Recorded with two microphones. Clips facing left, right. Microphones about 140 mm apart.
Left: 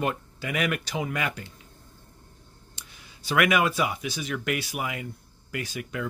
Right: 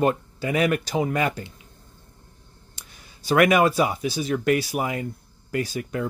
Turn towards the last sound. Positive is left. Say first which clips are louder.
# right 6 dB
turn(degrees=-35)  # may be behind; listen again after turning